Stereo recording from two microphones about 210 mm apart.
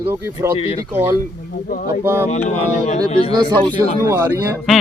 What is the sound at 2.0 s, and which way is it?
Speech, 10° right (ahead or behind).